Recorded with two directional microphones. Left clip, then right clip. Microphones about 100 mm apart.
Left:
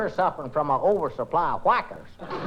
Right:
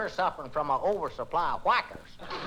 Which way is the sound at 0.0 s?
15° right (ahead or behind).